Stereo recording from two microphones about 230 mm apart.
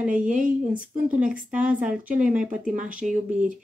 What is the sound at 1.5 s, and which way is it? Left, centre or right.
Speech, centre.